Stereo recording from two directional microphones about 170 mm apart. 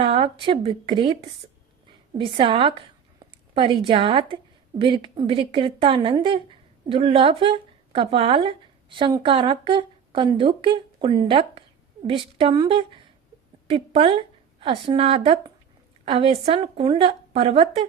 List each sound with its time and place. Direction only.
0.0 s a woman's voice: 35° right (ahead or behind)